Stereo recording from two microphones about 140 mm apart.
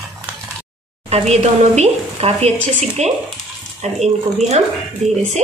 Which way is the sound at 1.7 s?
50° right (ahead or behind).